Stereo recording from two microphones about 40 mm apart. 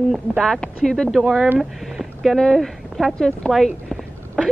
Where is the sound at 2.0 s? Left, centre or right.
Centre.